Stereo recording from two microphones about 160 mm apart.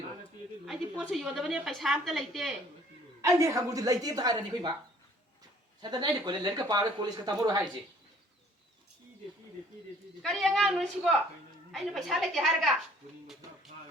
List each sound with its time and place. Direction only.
0.6 s a woman's voice: centre (ahead or behind)
3.2 s speech: 20° right (ahead or behind)
5.8 s speech: 25° right (ahead or behind)
10.2 s a woman's voice: centre (ahead or behind)